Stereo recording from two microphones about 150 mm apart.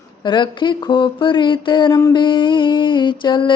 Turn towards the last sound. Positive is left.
turn(degrees=30)  # may be behind; listen again after turning